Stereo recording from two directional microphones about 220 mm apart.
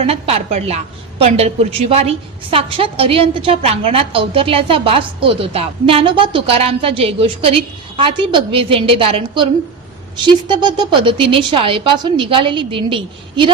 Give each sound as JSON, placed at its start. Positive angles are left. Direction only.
{"t": 0.0, "sound": "a woman's voice", "side_deg": -25}